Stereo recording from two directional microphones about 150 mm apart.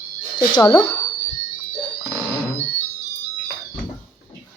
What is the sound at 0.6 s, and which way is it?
Speech, 20° left (ahead or behind).